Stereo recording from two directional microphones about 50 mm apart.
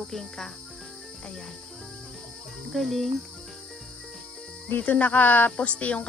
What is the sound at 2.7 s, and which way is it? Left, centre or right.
Speech, centre.